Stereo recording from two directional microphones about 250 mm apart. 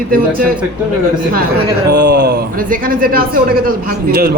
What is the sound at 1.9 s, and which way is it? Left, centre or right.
A man's voice, right.